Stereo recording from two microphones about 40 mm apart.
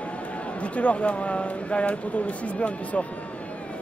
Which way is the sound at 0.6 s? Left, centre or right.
Left.